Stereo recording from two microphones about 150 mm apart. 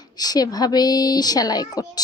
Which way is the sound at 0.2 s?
25° left (ahead or behind).